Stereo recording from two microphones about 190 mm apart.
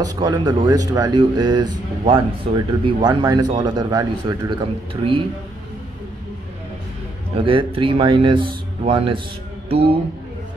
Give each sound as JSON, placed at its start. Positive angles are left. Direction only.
{"t": 0.0, "sound": "speech", "side_deg": -20}
{"t": 7.3, "sound": "speech", "side_deg": -30}